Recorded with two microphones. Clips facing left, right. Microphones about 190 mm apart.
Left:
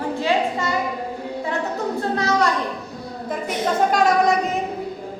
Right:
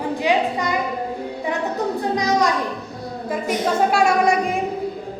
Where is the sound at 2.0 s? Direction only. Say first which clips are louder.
Even; 15° right (ahead or behind).